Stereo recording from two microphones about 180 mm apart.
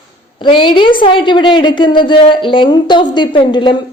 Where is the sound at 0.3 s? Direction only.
30° left (ahead or behind).